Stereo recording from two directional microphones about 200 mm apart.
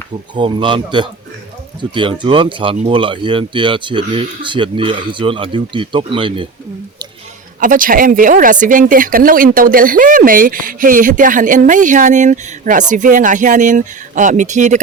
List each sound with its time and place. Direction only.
0.3 s speech: 25° right (ahead or behind)
7.6 s speech: 45° right (ahead or behind)